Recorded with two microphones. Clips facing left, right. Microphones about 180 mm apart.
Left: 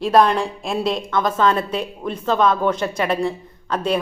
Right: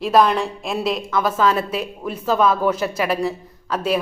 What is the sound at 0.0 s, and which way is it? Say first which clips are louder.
A woman's voice: left 1 dB; centre (ahead or behind).